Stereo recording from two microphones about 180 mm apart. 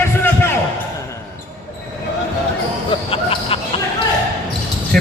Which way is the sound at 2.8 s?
30° left (ahead or behind).